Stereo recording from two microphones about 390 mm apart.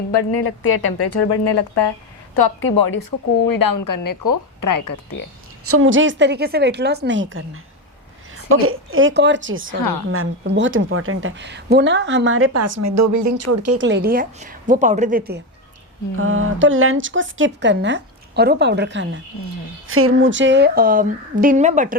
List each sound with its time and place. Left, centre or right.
0.1 s speech: left
2.4 s a woman's voice: left
5.6 s a woman's voice: right
9.7 s a woman's voice: left
10.1 s a woman's voice: right